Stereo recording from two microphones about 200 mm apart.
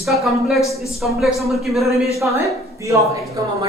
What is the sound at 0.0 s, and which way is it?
Speech, centre (ahead or behind).